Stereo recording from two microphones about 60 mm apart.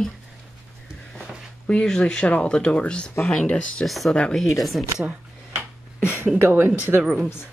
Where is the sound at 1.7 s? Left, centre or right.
Centre.